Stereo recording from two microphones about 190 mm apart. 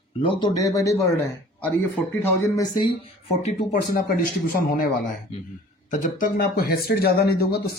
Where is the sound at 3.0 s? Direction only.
35° left (ahead or behind).